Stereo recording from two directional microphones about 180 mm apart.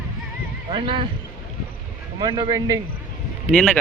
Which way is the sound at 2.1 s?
25° right (ahead or behind).